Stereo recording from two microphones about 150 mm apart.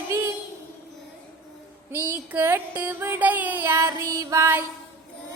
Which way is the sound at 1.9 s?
10° right (ahead or behind).